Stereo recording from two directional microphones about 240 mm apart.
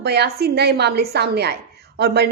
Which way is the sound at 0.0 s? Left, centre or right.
Right.